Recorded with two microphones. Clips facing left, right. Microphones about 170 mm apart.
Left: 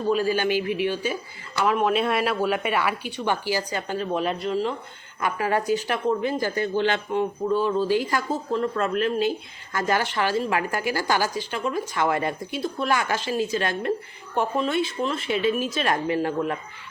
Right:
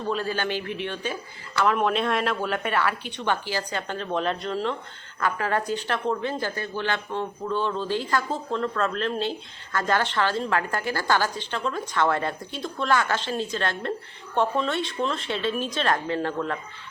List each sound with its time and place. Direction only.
0.1 s a woman's voice: 10° left (ahead or behind)